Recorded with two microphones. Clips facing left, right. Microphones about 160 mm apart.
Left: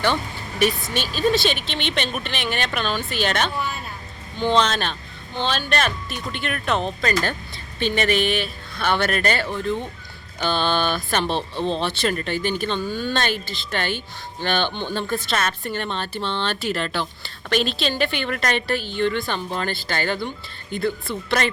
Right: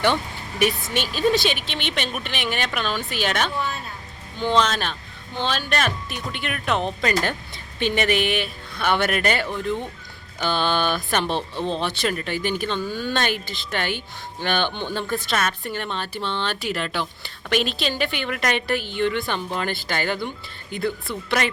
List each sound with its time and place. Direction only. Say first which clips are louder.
0.6 s a woman's voice: left 1 dB; 15° right (ahead or behind)
14.7 s speech: left 1 dB; 15° left (ahead or behind)
15.1 s a woman's voice: right 1 dB; 10° right (ahead or behind)